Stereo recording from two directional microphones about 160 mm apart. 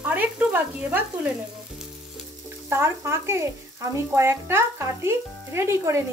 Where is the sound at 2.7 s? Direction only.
15° right (ahead or behind).